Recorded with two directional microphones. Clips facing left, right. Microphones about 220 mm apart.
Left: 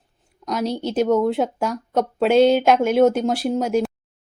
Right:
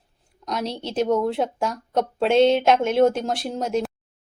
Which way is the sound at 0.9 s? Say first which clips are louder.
Left 2 dB; 5° left (ahead or behind).